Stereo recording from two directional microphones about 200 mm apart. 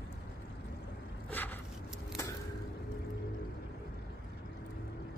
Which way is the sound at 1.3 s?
10° left (ahead or behind).